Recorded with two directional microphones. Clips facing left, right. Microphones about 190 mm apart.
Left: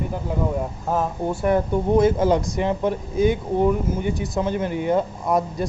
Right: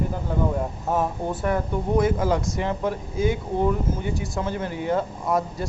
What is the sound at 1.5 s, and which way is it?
Speech, 25° left (ahead or behind).